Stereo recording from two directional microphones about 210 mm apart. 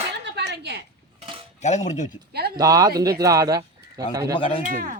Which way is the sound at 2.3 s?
50° right (ahead or behind).